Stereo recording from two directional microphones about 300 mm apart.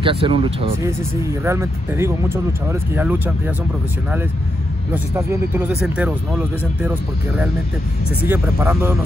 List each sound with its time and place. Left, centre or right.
0.0 s speech: centre
4.9 s speech: centre
8.3 s speech: centre